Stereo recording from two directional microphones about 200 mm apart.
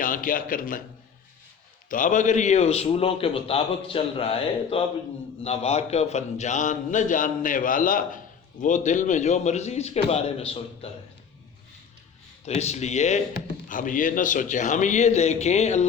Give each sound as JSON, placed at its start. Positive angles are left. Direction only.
{"t": 0.0, "sound": "a man's voice", "side_deg": 45}
{"t": 1.9, "sound": "a man's voice", "side_deg": 40}
{"t": 12.5, "sound": "a man's voice", "side_deg": 35}